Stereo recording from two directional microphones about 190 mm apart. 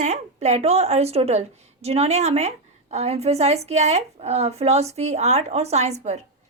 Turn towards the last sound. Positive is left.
turn(degrees=-35)  # may be behind; listen again after turning